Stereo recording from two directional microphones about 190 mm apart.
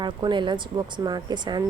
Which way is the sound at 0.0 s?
25° right (ahead or behind).